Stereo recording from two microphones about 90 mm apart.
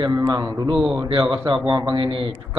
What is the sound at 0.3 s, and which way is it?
A man's voice, 45° right (ahead or behind).